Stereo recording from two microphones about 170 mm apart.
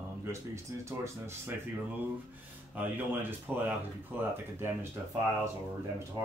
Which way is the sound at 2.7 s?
10° right (ahead or behind).